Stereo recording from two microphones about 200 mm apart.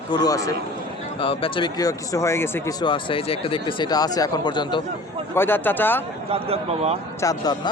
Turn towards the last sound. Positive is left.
turn(degrees=20)  # may be behind; listen again after turning